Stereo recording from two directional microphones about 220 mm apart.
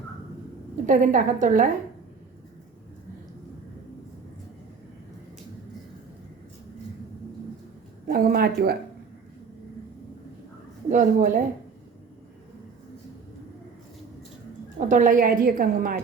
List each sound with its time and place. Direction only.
0.9 s a woman's voice: 35° right (ahead or behind)
8.0 s speech: 40° right (ahead or behind)
10.8 s a woman's voice: 35° right (ahead or behind)
14.8 s a woman's voice: 35° right (ahead or behind)